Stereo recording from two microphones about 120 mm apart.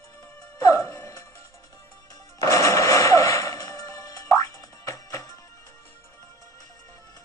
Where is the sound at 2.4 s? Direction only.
25° left (ahead or behind).